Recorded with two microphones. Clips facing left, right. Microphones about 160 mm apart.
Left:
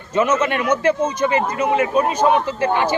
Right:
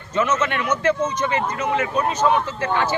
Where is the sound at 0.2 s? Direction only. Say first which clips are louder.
Left 3 dB; 10° left (ahead or behind).